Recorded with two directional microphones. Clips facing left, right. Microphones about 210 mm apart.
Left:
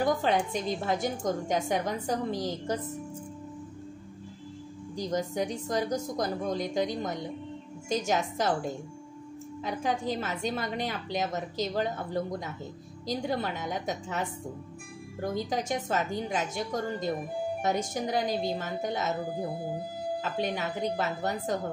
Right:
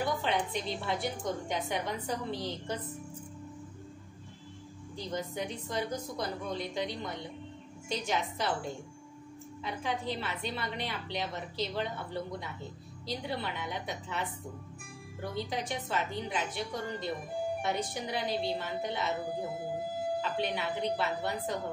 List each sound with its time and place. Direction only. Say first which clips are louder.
0.0 s a woman's voice: left 5 dB; 45° left (ahead or behind)
4.9 s a woman's voice: left 6 dB; 45° left (ahead or behind)
9.6 s a woman's voice: left 5 dB; 45° left (ahead or behind)
20.2 s a woman's voice: left 2 dB; 45° left (ahead or behind)